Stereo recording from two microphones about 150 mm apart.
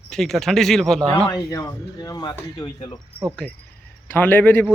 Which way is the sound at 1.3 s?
25° left (ahead or behind).